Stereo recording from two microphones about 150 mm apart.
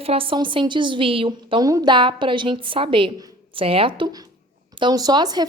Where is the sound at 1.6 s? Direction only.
25° right (ahead or behind).